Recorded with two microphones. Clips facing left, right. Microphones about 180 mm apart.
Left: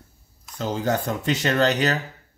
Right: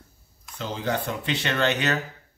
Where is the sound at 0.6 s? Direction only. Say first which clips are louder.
Left 4 dB; 45° left (ahead or behind).